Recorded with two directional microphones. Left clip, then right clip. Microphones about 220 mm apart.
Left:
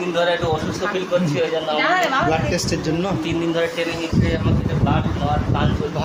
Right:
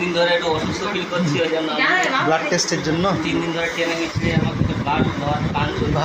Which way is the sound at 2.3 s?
10° left (ahead or behind).